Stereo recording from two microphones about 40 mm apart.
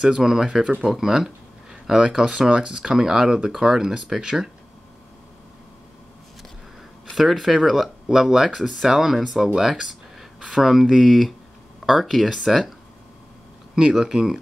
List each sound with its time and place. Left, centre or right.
0.0 s speech: centre
7.2 s speech: centre
13.7 s speech: centre